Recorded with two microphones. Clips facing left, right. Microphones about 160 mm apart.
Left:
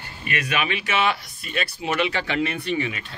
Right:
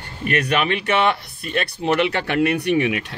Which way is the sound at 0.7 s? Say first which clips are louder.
Right 4 dB; 55° right (ahead or behind).